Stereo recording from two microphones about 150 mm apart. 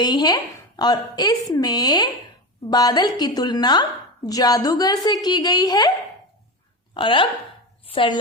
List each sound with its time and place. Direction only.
0.0 s speech: 25° left (ahead or behind)
6.9 s a woman's voice: 35° left (ahead or behind)